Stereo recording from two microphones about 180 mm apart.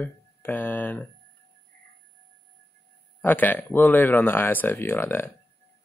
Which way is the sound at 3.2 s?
10° left (ahead or behind).